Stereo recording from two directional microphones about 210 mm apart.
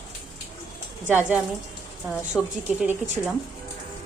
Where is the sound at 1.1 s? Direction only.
5° right (ahead or behind).